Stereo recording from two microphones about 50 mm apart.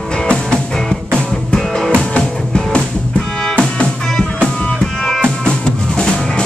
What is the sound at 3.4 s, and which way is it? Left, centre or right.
Music, centre.